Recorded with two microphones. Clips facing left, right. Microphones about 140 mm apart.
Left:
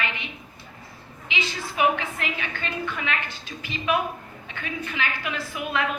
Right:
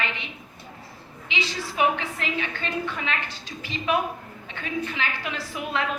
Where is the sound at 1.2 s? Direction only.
30° right (ahead or behind).